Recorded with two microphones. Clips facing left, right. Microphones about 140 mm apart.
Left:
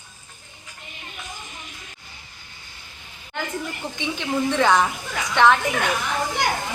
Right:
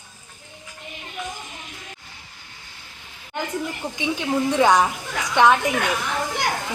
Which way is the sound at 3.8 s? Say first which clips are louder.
Right 3 dB; 10° right (ahead or behind).